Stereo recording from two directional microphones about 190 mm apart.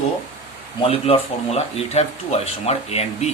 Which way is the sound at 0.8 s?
30° left (ahead or behind).